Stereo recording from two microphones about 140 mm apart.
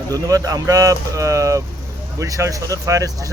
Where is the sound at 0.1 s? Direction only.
25° right (ahead or behind).